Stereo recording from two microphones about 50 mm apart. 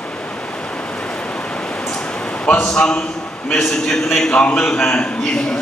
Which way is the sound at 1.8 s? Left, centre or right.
Centre.